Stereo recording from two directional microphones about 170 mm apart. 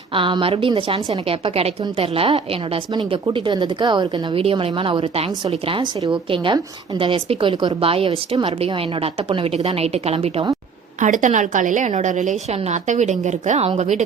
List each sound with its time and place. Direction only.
0.1 s a woman's voice: 30° right (ahead or behind)
11.0 s a woman's voice: 45° right (ahead or behind)